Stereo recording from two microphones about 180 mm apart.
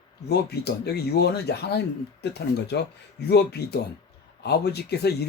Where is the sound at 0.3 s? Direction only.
65° left (ahead or behind).